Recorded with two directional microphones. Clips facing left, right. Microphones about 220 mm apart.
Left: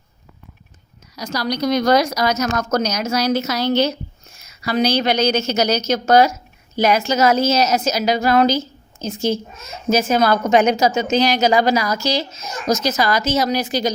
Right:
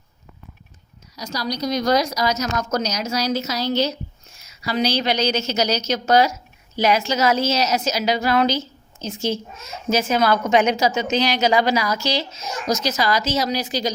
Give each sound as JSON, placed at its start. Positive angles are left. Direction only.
{"t": 1.1, "sound": "a woman's voice", "side_deg": 60}